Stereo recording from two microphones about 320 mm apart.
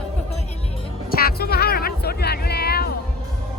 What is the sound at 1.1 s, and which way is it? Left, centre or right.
Music, left.